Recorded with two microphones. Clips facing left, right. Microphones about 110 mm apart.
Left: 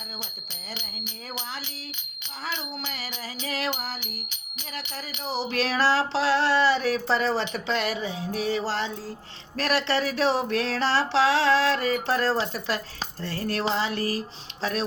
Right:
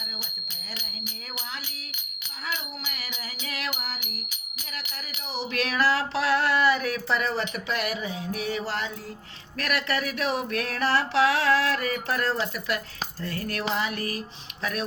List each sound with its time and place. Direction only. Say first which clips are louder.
2.9 s music: left 4 dB; 35° left (ahead or behind)
5.2 s a sound: left 3 dB; 35° left (ahead or behind)
9.6 s speech: left 3 dB; 30° left (ahead or behind)
13.2 s music: left 3 dB; 30° left (ahead or behind)
14.6 s speech: left 3 dB; 30° left (ahead or behind)